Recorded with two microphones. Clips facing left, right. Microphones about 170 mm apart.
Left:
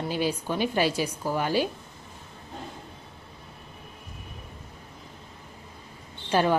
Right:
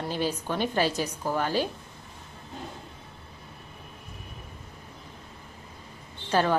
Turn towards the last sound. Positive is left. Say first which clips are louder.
# left 1 dB
turn(degrees=10)  # may be behind; listen again after turning